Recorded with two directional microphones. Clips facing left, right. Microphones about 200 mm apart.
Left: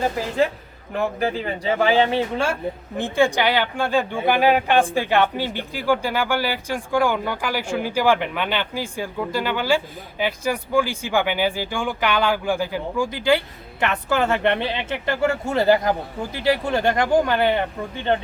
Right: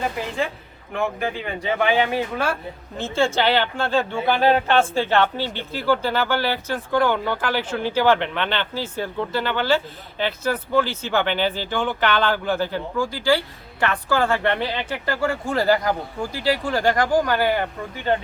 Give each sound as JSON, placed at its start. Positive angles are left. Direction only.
{"t": 0.9, "sound": "speech", "side_deg": 35}